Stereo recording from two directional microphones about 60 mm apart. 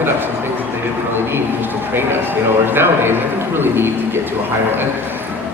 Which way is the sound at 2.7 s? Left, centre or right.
Right.